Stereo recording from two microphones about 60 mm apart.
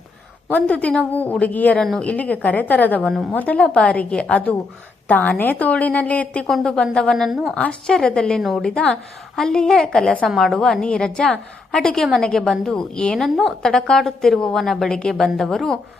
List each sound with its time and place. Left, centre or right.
0.4 s a woman's voice: left
1.7 s a woman's voice: centre
2.0 s a woman's voice: left
8.4 s a woman's voice: centre
13.2 s a woman's voice: centre